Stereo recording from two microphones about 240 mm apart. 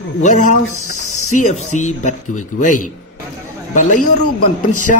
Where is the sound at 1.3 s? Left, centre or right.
Left.